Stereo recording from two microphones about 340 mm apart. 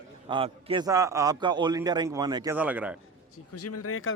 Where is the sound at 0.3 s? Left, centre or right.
Centre.